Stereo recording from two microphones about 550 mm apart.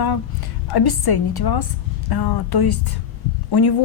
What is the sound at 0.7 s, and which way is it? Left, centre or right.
A woman's voice, left.